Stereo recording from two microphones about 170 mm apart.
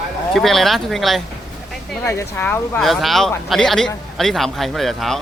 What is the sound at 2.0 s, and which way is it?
Speech, 15° left (ahead or behind).